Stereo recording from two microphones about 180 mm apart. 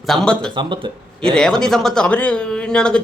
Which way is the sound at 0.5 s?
25° right (ahead or behind).